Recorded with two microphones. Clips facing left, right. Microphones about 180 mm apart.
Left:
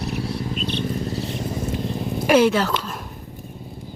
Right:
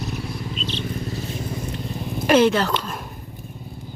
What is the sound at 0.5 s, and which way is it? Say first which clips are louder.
Vehicle: left 3 dB; 55° left (ahead or behind).